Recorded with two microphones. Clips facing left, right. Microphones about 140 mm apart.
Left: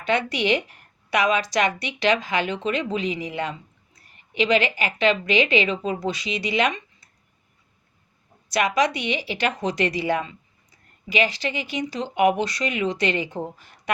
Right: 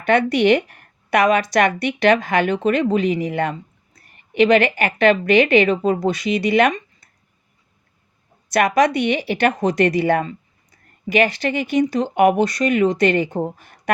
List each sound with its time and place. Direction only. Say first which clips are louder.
0.0 s a woman's voice: right 7 dB; 55° right (ahead or behind)
8.4 s a woman's voice: right 5 dB; 55° right (ahead or behind)